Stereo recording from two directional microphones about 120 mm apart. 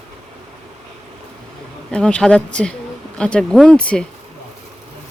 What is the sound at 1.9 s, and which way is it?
Speech, 10° left (ahead or behind).